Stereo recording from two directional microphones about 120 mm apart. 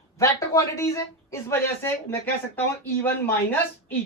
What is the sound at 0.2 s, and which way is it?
Speech, 25° left (ahead or behind).